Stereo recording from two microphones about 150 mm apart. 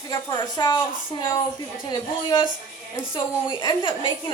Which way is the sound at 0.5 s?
30° left (ahead or behind).